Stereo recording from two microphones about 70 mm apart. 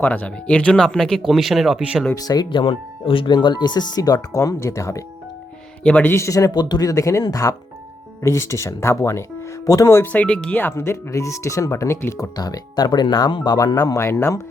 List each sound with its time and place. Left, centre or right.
0.0 s speech: left; by 1.8 s centre
2.1 s speech: left
3.2 s speech: left
5.8 s a man's voice: centre
6.1 s speech: left
6.5 s speech: left
6.8 s speech: left
10.1 s speech: centre
10.6 s speech: left
12.4 s speech: left
14.0 s speech: left